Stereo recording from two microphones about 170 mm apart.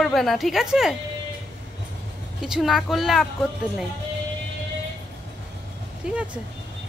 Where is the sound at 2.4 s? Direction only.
Centre (ahead or behind).